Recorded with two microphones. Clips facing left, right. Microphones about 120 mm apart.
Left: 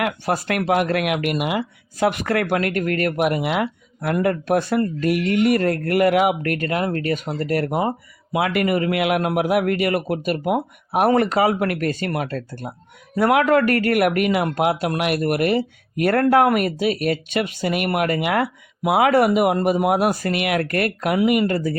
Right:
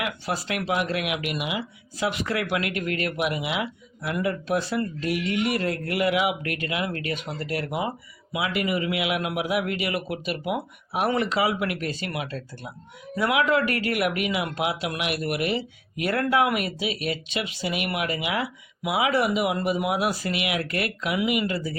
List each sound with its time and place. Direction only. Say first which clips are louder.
0.0 s speech: left 7 dB; 50° left (ahead or behind)